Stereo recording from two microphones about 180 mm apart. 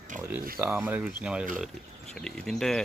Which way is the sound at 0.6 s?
10° right (ahead or behind).